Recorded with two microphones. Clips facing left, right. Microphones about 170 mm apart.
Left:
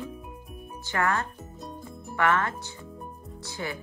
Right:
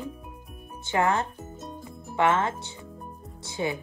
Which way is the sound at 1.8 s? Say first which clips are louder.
Right 2 dB; 20° right (ahead or behind).